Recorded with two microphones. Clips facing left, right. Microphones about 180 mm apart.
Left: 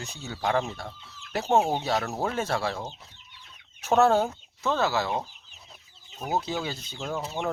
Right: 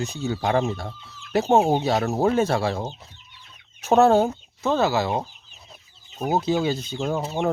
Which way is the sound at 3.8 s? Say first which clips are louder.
Right 5 dB; 25° right (ahead or behind).